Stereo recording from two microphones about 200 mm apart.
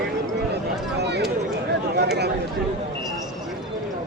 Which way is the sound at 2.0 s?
55° right (ahead or behind).